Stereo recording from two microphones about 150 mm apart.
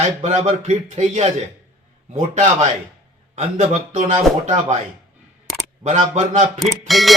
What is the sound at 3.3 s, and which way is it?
Speech, 50° right (ahead or behind).